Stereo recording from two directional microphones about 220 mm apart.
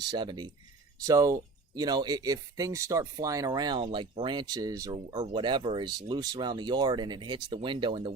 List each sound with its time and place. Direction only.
0.1 s speech: 20° right (ahead or behind)